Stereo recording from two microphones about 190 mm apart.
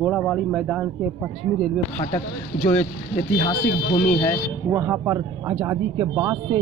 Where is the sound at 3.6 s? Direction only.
65° left (ahead or behind).